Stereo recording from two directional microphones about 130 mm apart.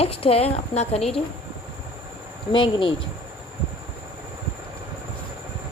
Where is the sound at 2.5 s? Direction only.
40° left (ahead or behind).